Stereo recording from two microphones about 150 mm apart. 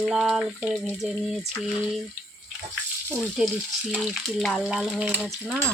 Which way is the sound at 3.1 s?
5° right (ahead or behind).